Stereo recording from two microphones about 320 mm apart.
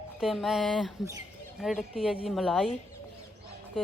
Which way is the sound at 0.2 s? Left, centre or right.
Centre.